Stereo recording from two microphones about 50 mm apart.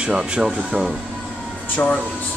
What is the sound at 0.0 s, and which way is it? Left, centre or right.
Speech, centre.